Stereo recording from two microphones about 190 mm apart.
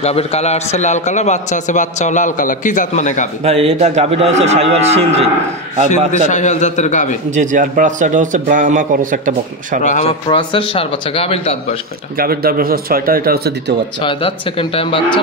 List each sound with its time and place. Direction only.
0.0 s a man's voice: 35° left (ahead or behind)
3.4 s a man's voice: 30° right (ahead or behind)
5.9 s a man's voice: 40° left (ahead or behind)
7.2 s a man's voice: 40° right (ahead or behind)
9.8 s a man's voice: 40° left (ahead or behind)
10.2 s speech: 25° left (ahead or behind)
12.2 s a man's voice: 50° right (ahead or behind)
14.0 s speech: 25° left (ahead or behind)